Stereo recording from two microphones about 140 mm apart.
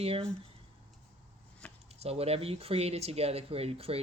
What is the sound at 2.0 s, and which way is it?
A woman's voice, 45° right (ahead or behind).